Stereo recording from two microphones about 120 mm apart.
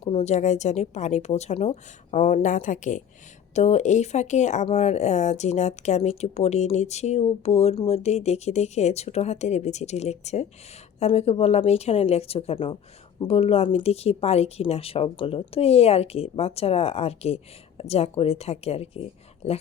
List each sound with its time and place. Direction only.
0.0 s a woman's voice: 50° left (ahead or behind)
0.3 s a woman's voice: 75° left (ahead or behind)
3.5 s speech: 70° left (ahead or behind)